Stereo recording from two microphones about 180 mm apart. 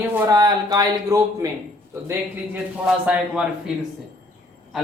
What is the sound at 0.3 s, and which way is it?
Speech, 20° right (ahead or behind).